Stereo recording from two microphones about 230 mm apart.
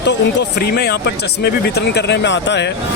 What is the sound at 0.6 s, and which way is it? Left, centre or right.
Speech, left.